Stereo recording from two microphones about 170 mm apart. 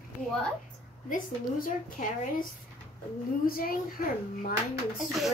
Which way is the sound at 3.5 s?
55° left (ahead or behind).